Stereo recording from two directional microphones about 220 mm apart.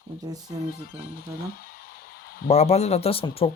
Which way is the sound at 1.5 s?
40° left (ahead or behind).